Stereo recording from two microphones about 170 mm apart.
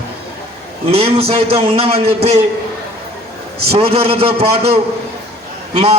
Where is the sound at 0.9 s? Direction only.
35° right (ahead or behind).